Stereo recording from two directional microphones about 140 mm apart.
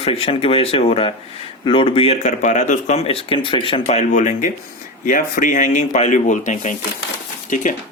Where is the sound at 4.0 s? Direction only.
65° left (ahead or behind).